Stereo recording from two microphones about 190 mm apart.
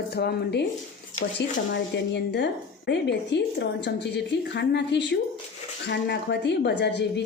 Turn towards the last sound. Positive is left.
turn(degrees=65)  # may be behind; listen again after turning